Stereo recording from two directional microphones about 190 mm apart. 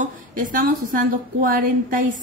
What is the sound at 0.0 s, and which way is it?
A woman's voice, 45° right (ahead or behind).